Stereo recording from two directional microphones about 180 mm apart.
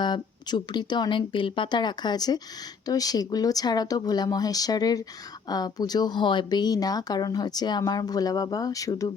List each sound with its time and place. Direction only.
0.0 s speech: 25° left (ahead or behind)